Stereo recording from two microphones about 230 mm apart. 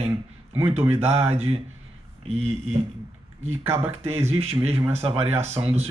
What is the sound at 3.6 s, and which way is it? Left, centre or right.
Speech, centre.